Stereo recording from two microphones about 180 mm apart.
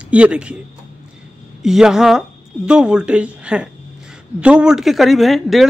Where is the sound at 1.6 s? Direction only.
5° right (ahead or behind).